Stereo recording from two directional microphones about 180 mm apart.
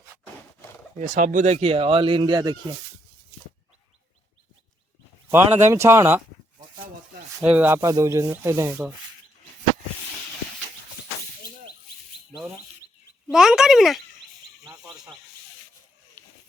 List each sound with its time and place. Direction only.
0.9 s speech: 45° right (ahead or behind); by 2.6 s 20° right (ahead or behind)
5.3 s speech: 10° right (ahead or behind)
7.3 s speech: 10° right (ahead or behind)
13.3 s speech: 5° right (ahead or behind)
16.2 s a sound: 10° left (ahead or behind)